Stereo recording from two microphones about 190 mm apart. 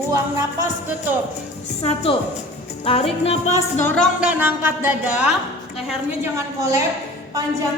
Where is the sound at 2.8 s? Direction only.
30° left (ahead or behind).